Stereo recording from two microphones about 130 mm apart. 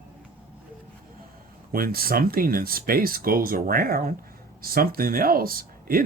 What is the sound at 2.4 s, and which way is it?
Speech, 90° right.